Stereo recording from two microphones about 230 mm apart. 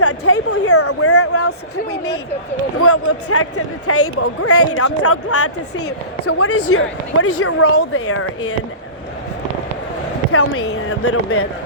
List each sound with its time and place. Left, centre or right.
0.0 s speech: left
2.8 s speech: left
10.3 s speech: left